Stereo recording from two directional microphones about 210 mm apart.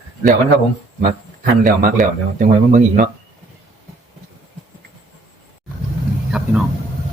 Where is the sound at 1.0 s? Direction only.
40° right (ahead or behind).